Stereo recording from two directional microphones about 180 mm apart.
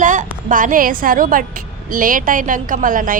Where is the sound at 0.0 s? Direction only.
45° right (ahead or behind).